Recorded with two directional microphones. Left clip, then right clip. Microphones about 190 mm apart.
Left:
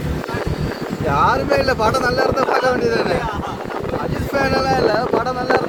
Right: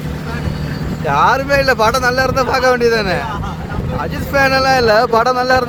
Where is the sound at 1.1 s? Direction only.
5° right (ahead or behind).